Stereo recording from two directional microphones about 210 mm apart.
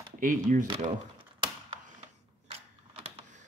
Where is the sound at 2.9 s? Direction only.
30° right (ahead or behind).